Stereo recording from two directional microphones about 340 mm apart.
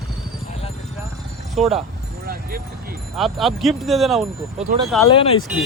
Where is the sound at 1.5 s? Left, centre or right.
Centre.